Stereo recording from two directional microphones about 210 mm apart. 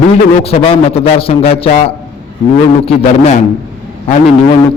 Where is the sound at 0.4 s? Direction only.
30° left (ahead or behind).